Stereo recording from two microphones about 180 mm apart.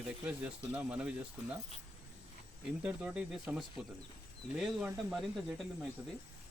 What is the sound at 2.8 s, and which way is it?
Speech, 5° right (ahead or behind).